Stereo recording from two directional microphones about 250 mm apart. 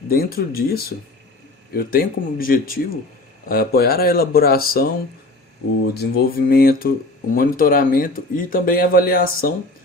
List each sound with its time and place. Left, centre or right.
0.1 s speech: left
5.9 s speech: left